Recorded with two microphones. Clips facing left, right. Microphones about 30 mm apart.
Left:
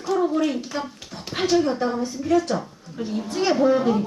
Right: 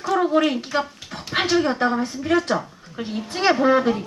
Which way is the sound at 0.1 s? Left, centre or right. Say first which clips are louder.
Right 2 dB; right.